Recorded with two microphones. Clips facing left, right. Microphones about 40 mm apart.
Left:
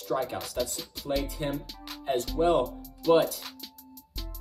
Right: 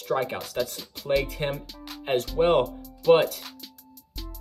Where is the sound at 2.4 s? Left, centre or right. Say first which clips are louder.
Right 3 dB; right.